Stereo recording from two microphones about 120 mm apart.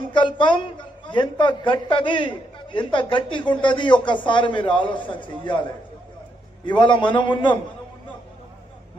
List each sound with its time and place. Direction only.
0.1 s a woman's voice: 40° left (ahead or behind)
6.7 s speech: 40° left (ahead or behind)